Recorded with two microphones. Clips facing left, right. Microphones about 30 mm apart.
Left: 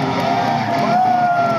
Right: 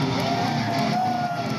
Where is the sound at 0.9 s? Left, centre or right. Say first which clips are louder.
Left 10 dB; left.